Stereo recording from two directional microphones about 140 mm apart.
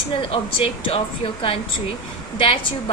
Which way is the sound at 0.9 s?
40° left (ahead or behind).